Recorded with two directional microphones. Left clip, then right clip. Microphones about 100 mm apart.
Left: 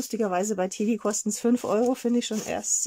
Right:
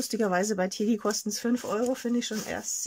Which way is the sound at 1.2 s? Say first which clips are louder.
Left 5 dB; 40° left (ahead or behind).